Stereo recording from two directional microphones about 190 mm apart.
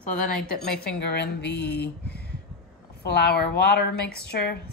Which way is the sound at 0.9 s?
60° left (ahead or behind).